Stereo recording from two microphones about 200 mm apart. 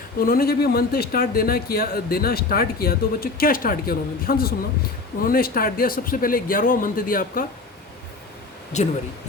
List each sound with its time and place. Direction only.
0.3 s speech: 50° left (ahead or behind)
8.7 s speech: 35° left (ahead or behind)